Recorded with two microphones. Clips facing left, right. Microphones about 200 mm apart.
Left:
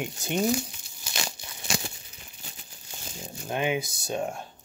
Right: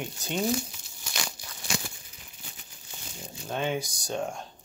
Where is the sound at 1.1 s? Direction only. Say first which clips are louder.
Left 2 dB; 25° left (ahead or behind).